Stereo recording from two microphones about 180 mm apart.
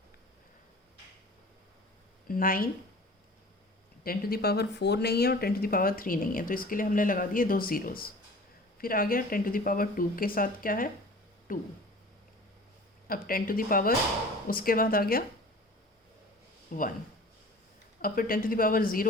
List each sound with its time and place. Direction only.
2.2 s speech: 50° left (ahead or behind)
4.0 s speech: 55° left (ahead or behind)
13.1 s speech: 55° left (ahead or behind)
16.7 s speech: 50° left (ahead or behind)
18.0 s speech: 50° left (ahead or behind)